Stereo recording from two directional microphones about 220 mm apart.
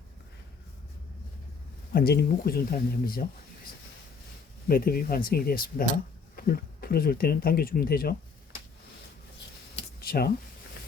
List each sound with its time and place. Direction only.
1.9 s speech: 45° left (ahead or behind)
4.7 s speech: 40° left (ahead or behind)
10.0 s speech: 45° left (ahead or behind)